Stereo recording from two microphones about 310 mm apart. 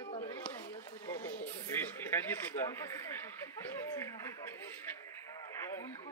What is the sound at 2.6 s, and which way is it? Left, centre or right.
Speech, centre.